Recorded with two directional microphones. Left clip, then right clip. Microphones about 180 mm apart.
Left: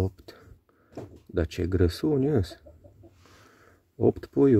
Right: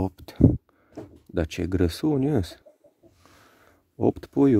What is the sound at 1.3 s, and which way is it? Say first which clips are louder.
Speech: right 1 dB; 25° right (ahead or behind).